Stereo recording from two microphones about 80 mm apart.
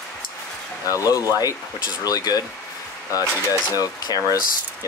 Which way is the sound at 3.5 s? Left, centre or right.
Left.